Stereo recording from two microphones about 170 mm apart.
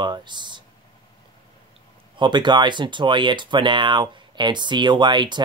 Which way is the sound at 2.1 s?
25° right (ahead or behind).